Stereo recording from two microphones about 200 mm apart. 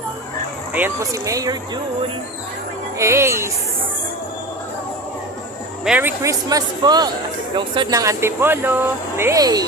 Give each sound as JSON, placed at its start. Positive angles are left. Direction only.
{"t": 0.7, "sound": "speech", "side_deg": -10}
{"t": 3.0, "sound": "speech", "side_deg": -15}
{"t": 5.8, "sound": "speech", "side_deg": -5}